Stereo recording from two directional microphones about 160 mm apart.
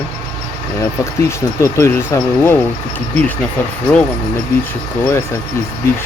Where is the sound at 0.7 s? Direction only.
15° left (ahead or behind).